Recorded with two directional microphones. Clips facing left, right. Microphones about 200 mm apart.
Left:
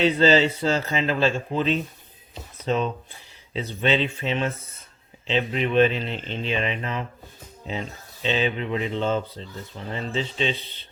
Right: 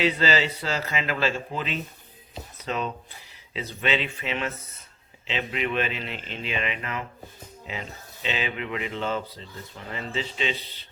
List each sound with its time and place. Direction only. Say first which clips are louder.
0.0 s a man's voice: left 6 dB; 25° left (ahead or behind)
3.5 s a man's voice: left 4 dB; 30° left (ahead or behind)